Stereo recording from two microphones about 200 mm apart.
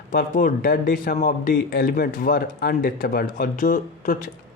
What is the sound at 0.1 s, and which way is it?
Speech, 45° left (ahead or behind).